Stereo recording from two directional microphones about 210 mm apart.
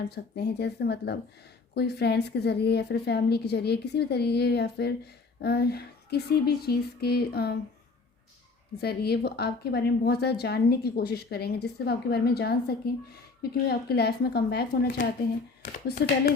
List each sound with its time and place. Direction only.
0.0 s a woman's voice: 50° left (ahead or behind)
8.8 s a woman's voice: 50° left (ahead or behind)